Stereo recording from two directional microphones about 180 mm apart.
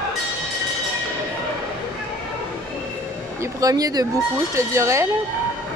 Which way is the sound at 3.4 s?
20° right (ahead or behind).